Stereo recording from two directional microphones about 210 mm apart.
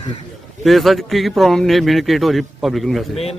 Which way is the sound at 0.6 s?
Centre (ahead or behind).